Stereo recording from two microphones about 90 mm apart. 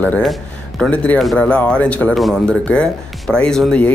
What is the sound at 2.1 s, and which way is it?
Speech, centre (ahead or behind).